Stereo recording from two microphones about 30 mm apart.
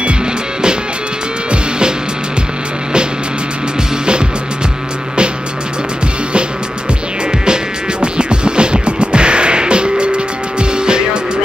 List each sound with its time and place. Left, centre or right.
1.5 s music: right
7.4 s music: right